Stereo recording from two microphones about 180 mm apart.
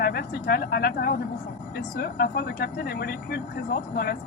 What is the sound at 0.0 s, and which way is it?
Speech, 60° left (ahead or behind).